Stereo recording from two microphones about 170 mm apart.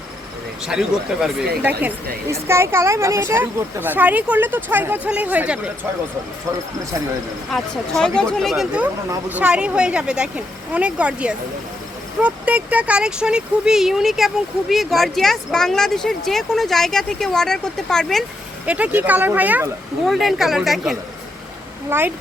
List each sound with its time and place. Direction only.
0.6 s speech: 5° right (ahead or behind)
2.2 s speech: 15° right (ahead or behind)
7.5 s speech: 5° left (ahead or behind)
18.6 s speech: 10° right (ahead or behind)
21.8 s speech: 15° right (ahead or behind)